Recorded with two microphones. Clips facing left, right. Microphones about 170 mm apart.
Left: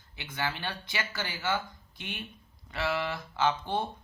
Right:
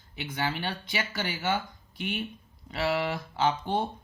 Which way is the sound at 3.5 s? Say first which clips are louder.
Right 2 dB; 15° right (ahead or behind).